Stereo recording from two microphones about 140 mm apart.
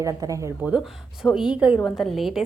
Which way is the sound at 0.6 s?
5° right (ahead or behind).